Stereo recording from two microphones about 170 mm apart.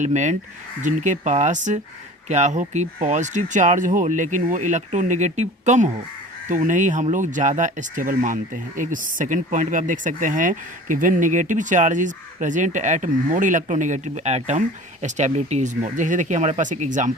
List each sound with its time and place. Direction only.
0.0 s speech: 45° right (ahead or behind)